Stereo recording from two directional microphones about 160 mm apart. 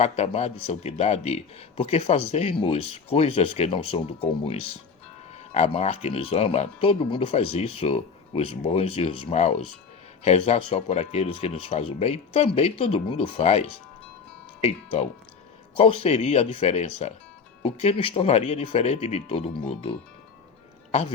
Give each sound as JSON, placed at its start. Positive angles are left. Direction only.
{"t": 0.0, "sound": "a man's voice", "side_deg": 40}